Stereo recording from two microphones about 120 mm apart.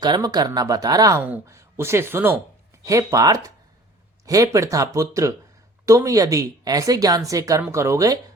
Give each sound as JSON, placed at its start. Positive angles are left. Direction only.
{"t": 0.0, "sound": "a woman's voice", "side_deg": -35}